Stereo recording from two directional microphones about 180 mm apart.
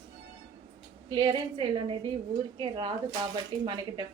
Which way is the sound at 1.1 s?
25° right (ahead or behind).